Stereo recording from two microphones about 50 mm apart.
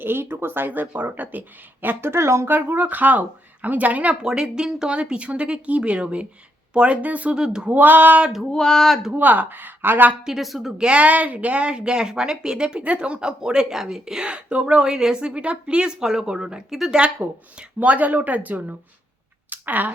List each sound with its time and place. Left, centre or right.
0.0 s speech: right
2.0 s speech: right
2.5 s speech: right
2.8 s speech: right
4.2 s speech: centre; by 7.3 s right
7.3 s a woman's voice: centre
7.7 s speech: right
8.5 s a sound: centre
9.1 s speech: right
10.2 s a woman's voice: centre
10.8 s a woman's voice: right; by 17.0 s centre
17.0 s speech: centre
19.5 s a sound: right